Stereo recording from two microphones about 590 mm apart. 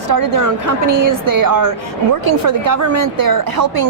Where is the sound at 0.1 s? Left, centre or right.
Right.